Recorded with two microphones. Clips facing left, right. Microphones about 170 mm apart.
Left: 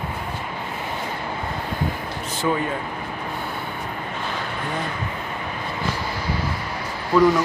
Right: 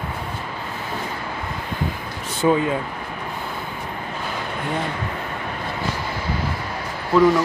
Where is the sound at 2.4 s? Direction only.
25° right (ahead or behind).